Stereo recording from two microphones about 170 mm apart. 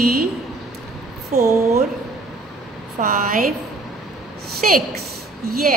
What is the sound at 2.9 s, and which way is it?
Speech, 55° right (ahead or behind).